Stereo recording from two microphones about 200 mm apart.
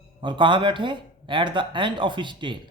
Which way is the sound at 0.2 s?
25° right (ahead or behind).